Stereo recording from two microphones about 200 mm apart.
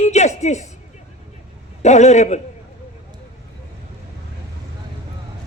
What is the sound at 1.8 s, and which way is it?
Speech, 35° left (ahead or behind).